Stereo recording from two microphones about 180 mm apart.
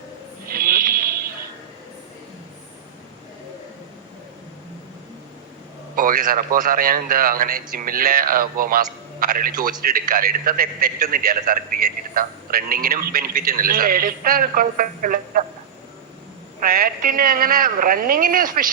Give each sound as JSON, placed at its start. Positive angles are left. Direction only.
{"t": 0.4, "sound": "a sound", "side_deg": -55}
{"t": 6.0, "sound": "a man's voice", "side_deg": -50}
{"t": 16.6, "sound": "a man's voice", "side_deg": -55}